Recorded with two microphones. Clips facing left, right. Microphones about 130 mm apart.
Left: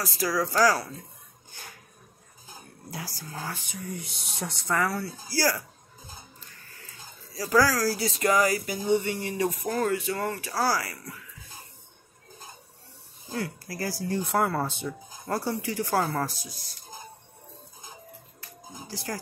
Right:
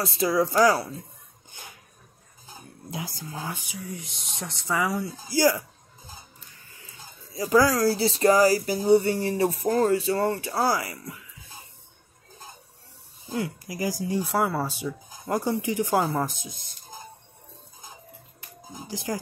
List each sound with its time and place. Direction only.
0.0 s speech: 25° right (ahead or behind)
1.5 s a sound: 20° right (ahead or behind)
2.9 s speech: 20° right (ahead or behind)
3.6 s speech: centre (ahead or behind)
4.8 s speech: 15° right (ahead or behind)
7.3 s speech: 20° right (ahead or behind)
13.3 s speech: 15° right (ahead or behind)
14.2 s speech: centre (ahead or behind); by 16.7 s 20° right (ahead or behind)
18.4 s music: 15° right (ahead or behind)